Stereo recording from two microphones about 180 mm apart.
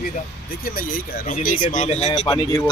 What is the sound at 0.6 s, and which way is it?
Speech, 55° left (ahead or behind).